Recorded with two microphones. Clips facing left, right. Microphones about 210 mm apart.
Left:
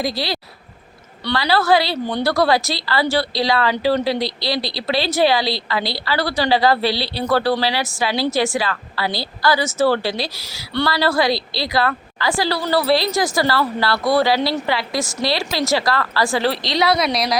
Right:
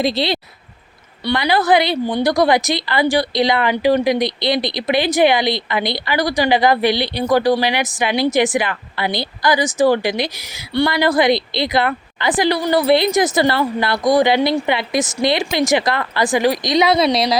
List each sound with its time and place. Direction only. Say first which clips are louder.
0.0 s a woman's voice: right 5 dB; 25° right (ahead or behind)